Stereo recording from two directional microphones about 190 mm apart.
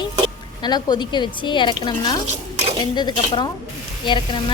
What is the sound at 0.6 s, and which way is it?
A woman's voice, 20° left (ahead or behind).